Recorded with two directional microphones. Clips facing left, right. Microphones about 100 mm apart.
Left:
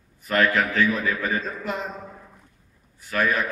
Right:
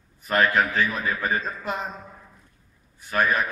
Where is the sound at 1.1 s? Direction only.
35° right (ahead or behind).